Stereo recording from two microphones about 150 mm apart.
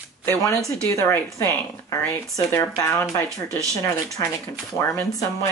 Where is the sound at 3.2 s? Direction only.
20° right (ahead or behind).